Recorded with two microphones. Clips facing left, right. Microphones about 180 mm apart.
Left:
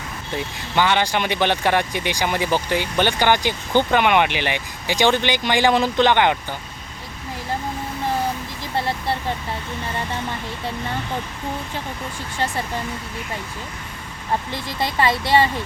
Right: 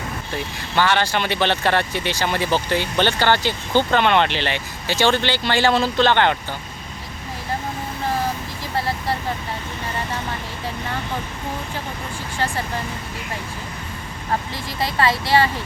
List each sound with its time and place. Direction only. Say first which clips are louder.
0.8 s speech: even; 15° left (ahead or behind)
14.8 s speech: even; 20° left (ahead or behind)